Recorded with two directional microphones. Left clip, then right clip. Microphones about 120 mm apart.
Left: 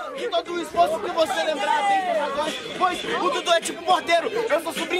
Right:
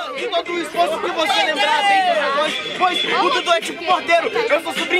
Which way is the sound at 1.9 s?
45° right (ahead or behind).